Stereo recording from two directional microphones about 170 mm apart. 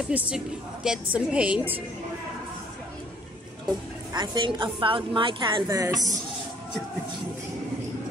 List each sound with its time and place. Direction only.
0.1 s a woman's voice: 10° right (ahead or behind)
4.1 s a woman's voice: 25° right (ahead or behind)